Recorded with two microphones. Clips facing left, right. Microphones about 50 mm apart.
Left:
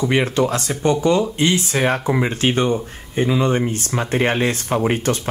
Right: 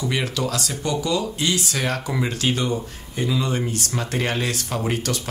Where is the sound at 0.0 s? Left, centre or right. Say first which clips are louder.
Left 7 dB; left.